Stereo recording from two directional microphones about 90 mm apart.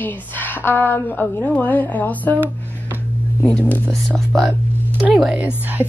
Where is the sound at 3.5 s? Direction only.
20° left (ahead or behind).